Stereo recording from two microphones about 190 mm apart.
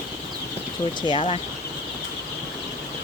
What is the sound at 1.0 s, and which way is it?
Speech, 25° left (ahead or behind).